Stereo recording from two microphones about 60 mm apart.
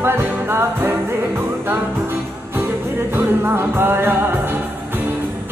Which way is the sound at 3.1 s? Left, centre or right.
Right.